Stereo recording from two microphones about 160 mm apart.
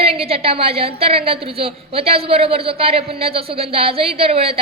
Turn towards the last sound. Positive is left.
turn(degrees=-35)  # may be behind; listen again after turning